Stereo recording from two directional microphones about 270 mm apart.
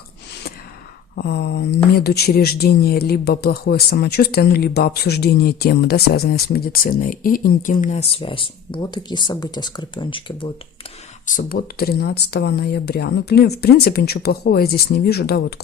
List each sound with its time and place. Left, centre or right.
1.1 s speech: left; by 10.5 s centre
11.3 s speech: left